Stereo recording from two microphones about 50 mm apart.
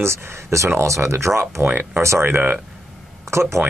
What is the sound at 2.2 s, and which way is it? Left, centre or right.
Speech, right.